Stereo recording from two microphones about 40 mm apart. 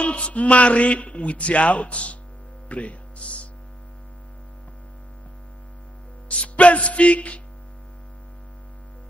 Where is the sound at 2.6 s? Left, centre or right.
Left.